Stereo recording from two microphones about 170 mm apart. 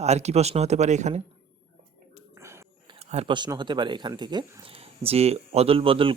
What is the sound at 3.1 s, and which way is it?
Speech, 35° right (ahead or behind).